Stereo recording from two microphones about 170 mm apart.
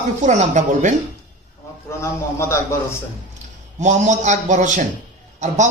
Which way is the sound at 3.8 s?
45° right (ahead or behind).